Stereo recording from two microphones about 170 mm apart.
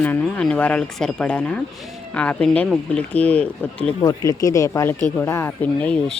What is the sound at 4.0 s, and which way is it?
Speech, 20° left (ahead or behind).